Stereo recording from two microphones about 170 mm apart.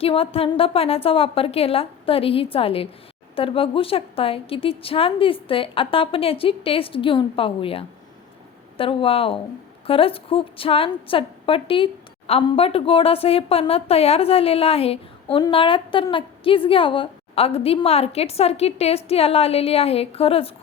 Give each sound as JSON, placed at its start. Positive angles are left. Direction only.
{"t": 0.0, "sound": "a woman's voice", "side_deg": 35}